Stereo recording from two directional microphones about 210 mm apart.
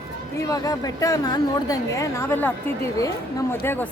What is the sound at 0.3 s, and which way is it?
A woman's voice, 15° left (ahead or behind).